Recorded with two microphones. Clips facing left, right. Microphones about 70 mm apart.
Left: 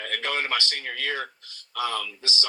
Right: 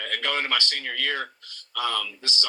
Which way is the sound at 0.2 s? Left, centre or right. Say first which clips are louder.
Right 1 dB; centre.